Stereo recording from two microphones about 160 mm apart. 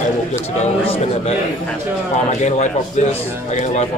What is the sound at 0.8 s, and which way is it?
Speech, 35° left (ahead or behind).